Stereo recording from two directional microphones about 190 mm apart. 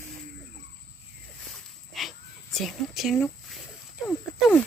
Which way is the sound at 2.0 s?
Centre (ahead or behind).